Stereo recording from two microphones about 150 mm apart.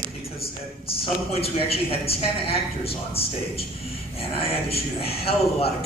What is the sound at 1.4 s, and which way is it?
A woman's voice, 40° left (ahead or behind).